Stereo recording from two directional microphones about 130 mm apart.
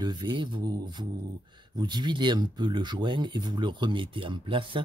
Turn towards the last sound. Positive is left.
turn(degrees=-40)  # may be behind; listen again after turning